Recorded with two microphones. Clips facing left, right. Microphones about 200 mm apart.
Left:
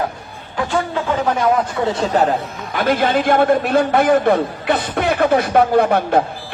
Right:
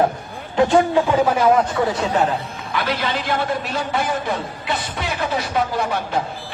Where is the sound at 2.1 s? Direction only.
35° left (ahead or behind).